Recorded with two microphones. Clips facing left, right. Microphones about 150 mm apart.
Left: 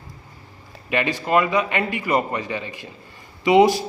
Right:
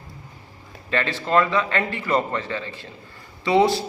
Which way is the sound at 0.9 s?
15° left (ahead or behind).